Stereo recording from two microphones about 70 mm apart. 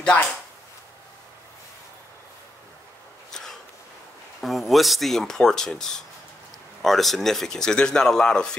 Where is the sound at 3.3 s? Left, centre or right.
Centre.